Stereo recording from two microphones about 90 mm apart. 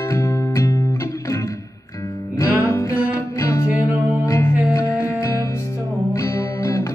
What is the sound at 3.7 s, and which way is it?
Music, 20° right (ahead or behind).